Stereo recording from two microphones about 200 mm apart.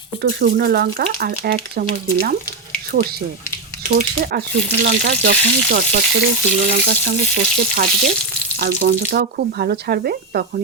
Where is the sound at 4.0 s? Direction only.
45° right (ahead or behind).